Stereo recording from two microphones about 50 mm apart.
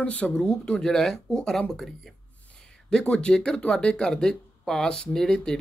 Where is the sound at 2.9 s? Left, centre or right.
Centre.